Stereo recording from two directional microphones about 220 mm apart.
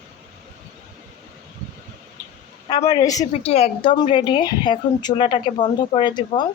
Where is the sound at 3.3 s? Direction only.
30° left (ahead or behind).